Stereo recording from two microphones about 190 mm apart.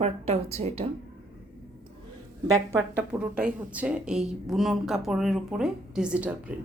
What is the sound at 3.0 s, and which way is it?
Speech, 5° right (ahead or behind).